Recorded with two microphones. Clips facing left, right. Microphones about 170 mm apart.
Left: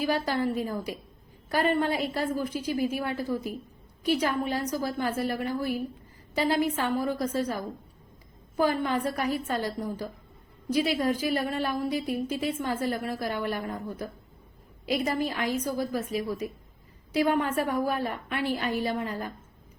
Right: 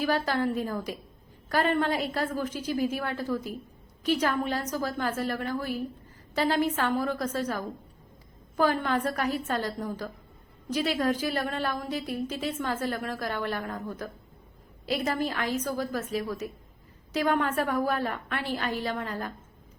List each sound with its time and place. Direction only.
0.0 s a woman's voice: 10° left (ahead or behind)